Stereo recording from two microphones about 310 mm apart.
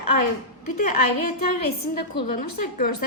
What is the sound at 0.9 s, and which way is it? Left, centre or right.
Speech, left.